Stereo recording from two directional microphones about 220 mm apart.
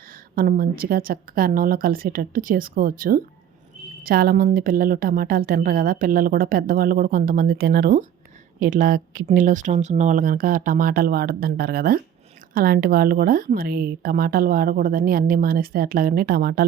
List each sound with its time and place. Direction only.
0.3 s a woman's voice: 40° right (ahead or behind)